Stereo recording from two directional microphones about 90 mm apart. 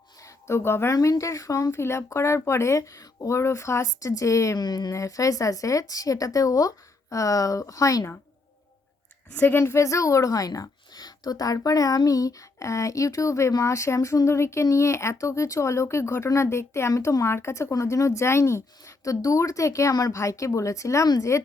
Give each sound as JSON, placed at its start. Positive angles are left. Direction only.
{"t": 0.2, "sound": "a sound", "side_deg": 35}
{"t": 0.9, "sound": "speech", "side_deg": 40}
{"t": 4.6, "sound": "speech", "side_deg": 50}
{"t": 9.3, "sound": "speech", "side_deg": 20}